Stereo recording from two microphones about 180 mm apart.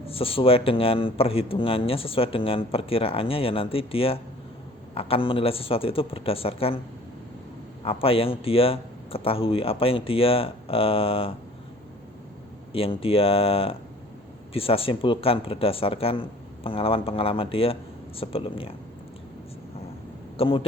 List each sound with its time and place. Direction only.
0.0 s speech: 30° left (ahead or behind)
7.9 s speech: 30° left (ahead or behind)
12.7 s speech: 30° left (ahead or behind)
20.3 s speech: 30° left (ahead or behind)